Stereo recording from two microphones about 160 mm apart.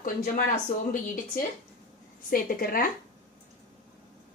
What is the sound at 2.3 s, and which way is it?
Speech, 60° left (ahead or behind).